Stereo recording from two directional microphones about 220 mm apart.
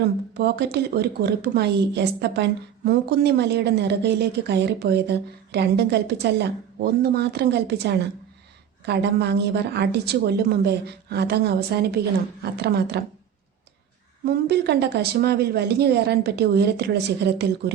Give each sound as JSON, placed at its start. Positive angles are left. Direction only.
{"t": 0.0, "sound": "a woman's voice", "side_deg": -50}
{"t": 14.3, "sound": "a woman's voice", "side_deg": -45}